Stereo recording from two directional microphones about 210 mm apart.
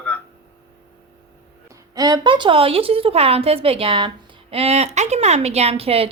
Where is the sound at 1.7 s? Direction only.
20° right (ahead or behind).